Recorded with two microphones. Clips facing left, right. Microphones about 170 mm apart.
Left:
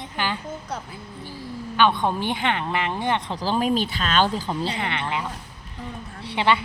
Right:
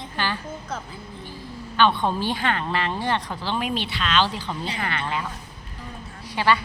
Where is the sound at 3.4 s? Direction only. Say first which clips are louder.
Left 4 dB; 40° left (ahead or behind).